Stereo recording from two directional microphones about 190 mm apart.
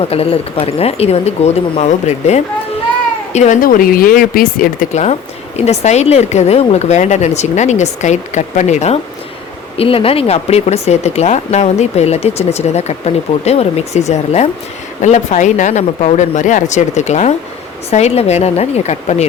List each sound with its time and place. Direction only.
0.0 s speech: 30° left (ahead or behind)